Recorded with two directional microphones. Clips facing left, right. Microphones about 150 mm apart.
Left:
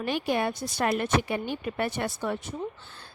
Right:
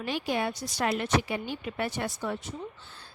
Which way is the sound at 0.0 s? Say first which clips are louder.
Left 3 dB; 55° left (ahead or behind).